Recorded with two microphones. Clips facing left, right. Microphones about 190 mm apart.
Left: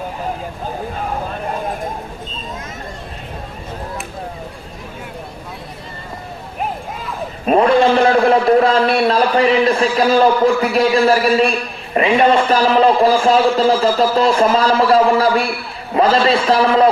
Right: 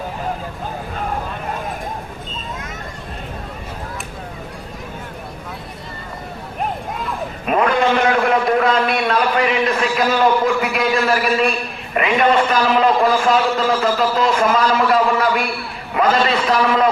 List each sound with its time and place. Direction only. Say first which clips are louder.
7.4 s a man's voice: left 5 dB; 30° left (ahead or behind)